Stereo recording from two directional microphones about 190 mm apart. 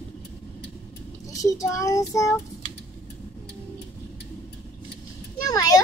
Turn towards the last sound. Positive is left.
turn(degrees=20)  # may be behind; listen again after turning